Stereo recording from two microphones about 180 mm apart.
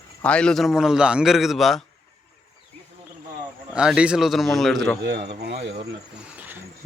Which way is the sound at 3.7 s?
5° right (ahead or behind).